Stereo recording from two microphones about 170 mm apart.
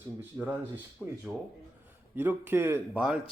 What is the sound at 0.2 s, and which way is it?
Speech, 10° right (ahead or behind).